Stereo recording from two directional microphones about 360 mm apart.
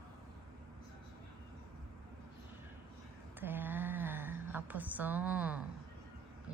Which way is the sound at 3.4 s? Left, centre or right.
Centre.